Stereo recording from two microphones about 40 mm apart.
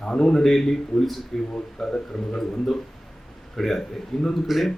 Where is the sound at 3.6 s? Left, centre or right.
Centre.